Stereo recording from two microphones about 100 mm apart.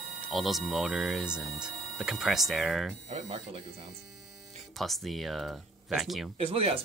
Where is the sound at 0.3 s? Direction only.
Centre (ahead or behind).